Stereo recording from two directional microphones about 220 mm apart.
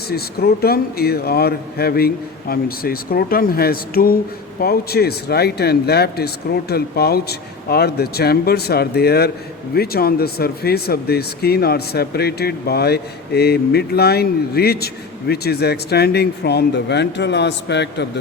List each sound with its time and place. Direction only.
0.1 s speech: 45° left (ahead or behind)